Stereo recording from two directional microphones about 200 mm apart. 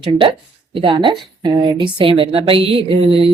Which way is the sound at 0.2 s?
25° right (ahead or behind).